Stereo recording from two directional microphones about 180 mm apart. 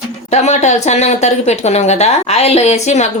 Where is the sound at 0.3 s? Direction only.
40° left (ahead or behind).